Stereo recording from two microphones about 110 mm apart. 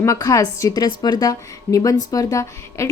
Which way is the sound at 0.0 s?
30° left (ahead or behind).